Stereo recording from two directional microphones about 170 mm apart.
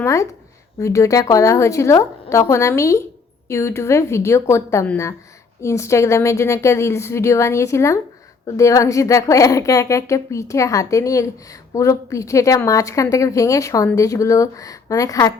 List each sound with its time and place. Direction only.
0.0 s a woman's voice: 20° left (ahead or behind)